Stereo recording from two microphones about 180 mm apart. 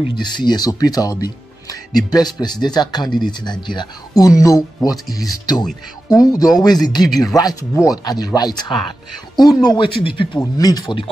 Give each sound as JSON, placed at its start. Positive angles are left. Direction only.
{"t": 0.1, "sound": "speech", "side_deg": 25}